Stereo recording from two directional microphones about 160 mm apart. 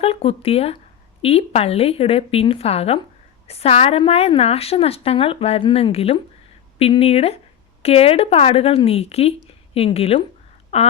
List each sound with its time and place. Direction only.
0.0 s a woman's voice: 35° left (ahead or behind)